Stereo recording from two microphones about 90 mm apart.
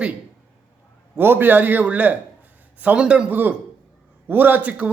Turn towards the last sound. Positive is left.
turn(degrees=-15)  # may be behind; listen again after turning